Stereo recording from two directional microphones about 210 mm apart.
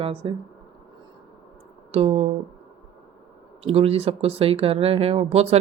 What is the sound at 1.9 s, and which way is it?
Speech, 30° right (ahead or behind).